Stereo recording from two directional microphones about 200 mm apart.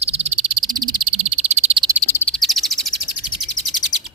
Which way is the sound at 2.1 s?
10° left (ahead or behind).